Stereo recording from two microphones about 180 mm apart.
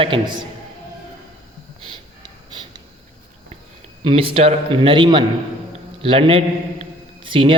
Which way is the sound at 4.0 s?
30° right (ahead or behind).